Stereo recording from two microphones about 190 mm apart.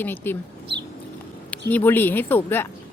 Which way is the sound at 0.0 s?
10° left (ahead or behind).